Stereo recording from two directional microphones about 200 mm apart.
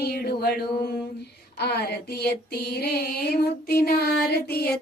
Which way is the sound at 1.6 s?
55° left (ahead or behind).